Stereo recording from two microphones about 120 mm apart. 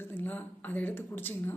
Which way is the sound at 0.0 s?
15° left (ahead or behind).